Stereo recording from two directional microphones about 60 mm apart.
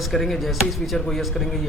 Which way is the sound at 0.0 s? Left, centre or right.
Centre.